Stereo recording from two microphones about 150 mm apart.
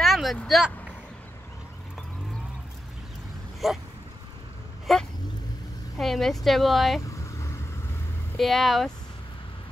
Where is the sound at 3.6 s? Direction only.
Centre (ahead or behind).